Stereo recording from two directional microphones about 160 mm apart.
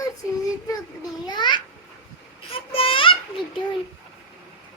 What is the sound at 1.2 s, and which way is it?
Babbling, 30° left (ahead or behind).